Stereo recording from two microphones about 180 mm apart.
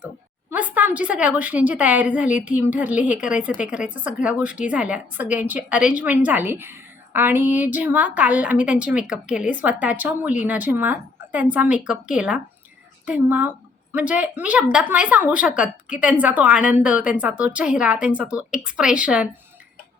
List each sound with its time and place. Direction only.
0.5 s a woman's voice: 10° right (ahead or behind)